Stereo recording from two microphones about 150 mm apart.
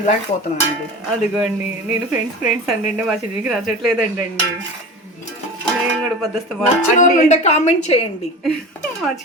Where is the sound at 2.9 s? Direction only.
5° right (ahead or behind).